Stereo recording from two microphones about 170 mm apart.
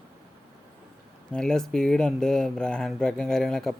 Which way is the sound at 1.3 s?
5° left (ahead or behind).